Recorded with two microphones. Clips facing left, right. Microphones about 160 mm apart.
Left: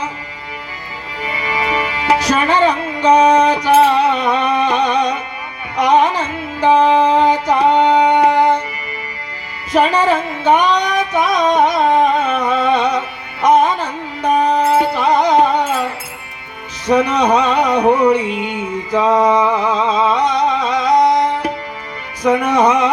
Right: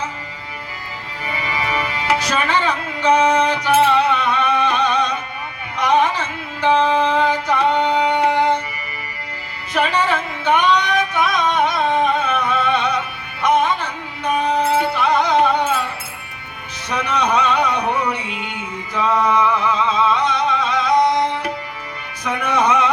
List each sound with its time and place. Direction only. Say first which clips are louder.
1.7 s music: left 4 dB; 35° left (ahead or behind)
6.7 s music: left 4 dB; 15° left (ahead or behind)
7.0 s music: left 5 dB; 40° left (ahead or behind)
9.7 s music: left 5 dB; 40° left (ahead or behind)